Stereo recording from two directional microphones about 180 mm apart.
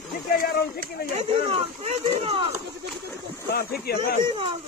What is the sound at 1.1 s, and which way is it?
Speech, 35° right (ahead or behind).